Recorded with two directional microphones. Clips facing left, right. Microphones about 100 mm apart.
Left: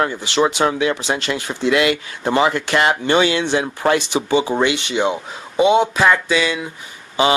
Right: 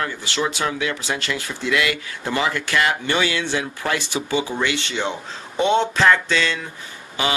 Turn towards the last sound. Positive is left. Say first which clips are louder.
# left 7 dB
turn(degrees=20)  # may be behind; listen again after turning